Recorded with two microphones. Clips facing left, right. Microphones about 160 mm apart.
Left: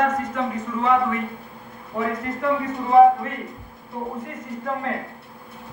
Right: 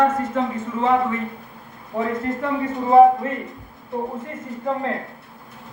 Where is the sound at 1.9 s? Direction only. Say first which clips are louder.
Right 3 dB; 30° right (ahead or behind).